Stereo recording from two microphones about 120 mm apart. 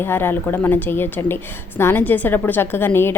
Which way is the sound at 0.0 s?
20° left (ahead or behind).